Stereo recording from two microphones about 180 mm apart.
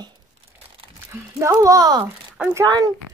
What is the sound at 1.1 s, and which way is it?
Speech, 15° right (ahead or behind).